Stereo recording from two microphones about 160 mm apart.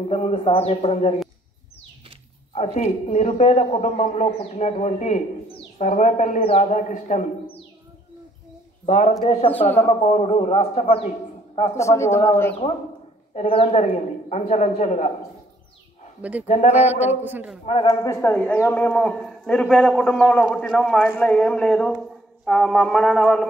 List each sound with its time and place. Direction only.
0.1 s a man's voice: 40° left (ahead or behind)
2.5 s a man's voice: 45° left (ahead or behind)
8.8 s a man's voice: 50° left (ahead or behind)
9.5 s speech: 10° left (ahead or behind)
9.8 s a man's voice: 45° left (ahead or behind)
11.8 s speech: 20° left (ahead or behind)
13.3 s a man's voice: 40° left (ahead or behind)
16.2 s a man's voice: 10° right (ahead or behind)
16.4 s a man's voice: 45° left (ahead or behind)
16.7 s a man's voice: 10° right (ahead or behind)
17.8 s speech: 20° left (ahead or behind)
18.3 s a man's voice: 10° left (ahead or behind)